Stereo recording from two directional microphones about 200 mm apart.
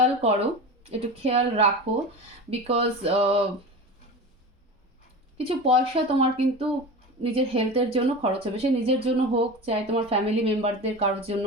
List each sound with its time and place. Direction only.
0.0 s a woman's voice: 30° right (ahead or behind)
5.4 s speech: 25° right (ahead or behind)